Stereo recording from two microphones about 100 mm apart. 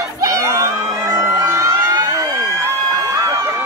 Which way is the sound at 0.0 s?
30° right (ahead or behind).